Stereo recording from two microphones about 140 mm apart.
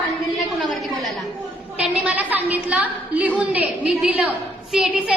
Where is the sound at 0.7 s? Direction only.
Centre (ahead or behind).